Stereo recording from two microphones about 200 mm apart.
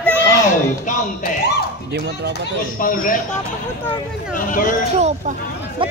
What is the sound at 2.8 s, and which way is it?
Speech, 45° left (ahead or behind).